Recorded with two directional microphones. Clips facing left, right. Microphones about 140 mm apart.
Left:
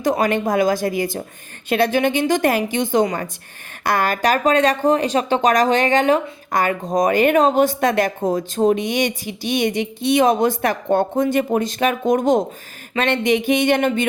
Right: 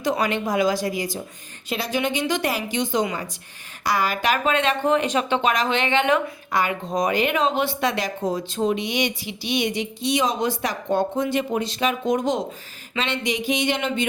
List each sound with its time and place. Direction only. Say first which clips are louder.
0.0 s speech: left 5 dB; 45° left (ahead or behind)